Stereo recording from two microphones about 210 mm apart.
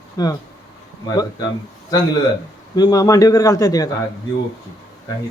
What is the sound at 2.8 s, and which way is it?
Speech, 20° left (ahead or behind).